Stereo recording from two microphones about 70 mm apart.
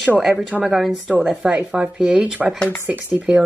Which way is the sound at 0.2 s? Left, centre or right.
Centre.